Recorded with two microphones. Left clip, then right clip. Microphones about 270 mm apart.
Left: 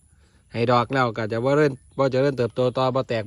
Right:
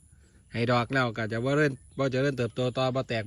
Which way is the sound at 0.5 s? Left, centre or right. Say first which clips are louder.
Left 6 dB; centre.